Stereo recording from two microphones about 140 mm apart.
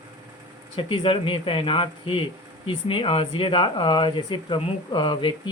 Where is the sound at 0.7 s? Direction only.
40° left (ahead or behind).